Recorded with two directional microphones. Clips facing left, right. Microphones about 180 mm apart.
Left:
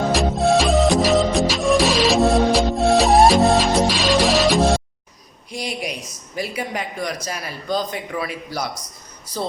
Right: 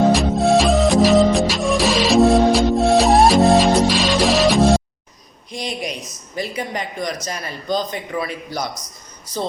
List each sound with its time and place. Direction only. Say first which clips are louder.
0.1 s music: right 2 dB; centre (ahead or behind)
5.5 s speech: right 1 dB; 5° left (ahead or behind)